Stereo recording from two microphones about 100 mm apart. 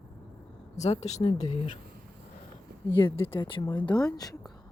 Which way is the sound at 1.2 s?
55° left (ahead or behind).